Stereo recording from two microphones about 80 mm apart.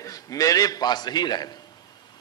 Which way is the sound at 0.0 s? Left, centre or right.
Left.